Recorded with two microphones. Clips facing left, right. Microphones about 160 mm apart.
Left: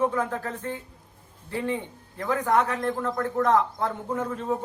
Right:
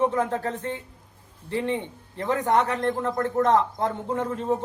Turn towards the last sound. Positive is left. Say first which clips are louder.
# right 2 dB
turn(degrees=-30)  # may be behind; listen again after turning